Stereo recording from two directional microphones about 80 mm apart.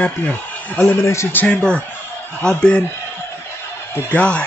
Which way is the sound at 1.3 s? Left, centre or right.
Centre.